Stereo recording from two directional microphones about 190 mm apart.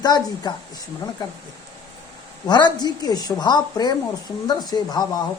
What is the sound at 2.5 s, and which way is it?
A woman's voice, 20° left (ahead or behind).